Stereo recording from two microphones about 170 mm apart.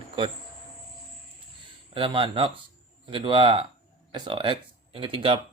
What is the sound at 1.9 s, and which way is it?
Speech, 30° right (ahead or behind).